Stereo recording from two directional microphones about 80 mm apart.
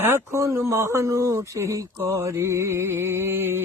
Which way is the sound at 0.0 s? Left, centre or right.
Right.